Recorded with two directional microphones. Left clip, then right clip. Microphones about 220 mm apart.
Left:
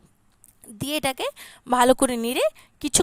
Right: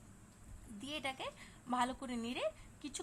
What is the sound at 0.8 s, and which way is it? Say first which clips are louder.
A woman's voice: left 17 dB; 50° left (ahead or behind).